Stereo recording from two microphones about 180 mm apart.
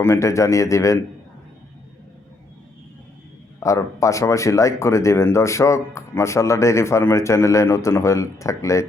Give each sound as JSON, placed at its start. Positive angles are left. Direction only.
{"t": 0.0, "sound": "speech", "side_deg": 15}
{"t": 3.6, "sound": "speech", "side_deg": 15}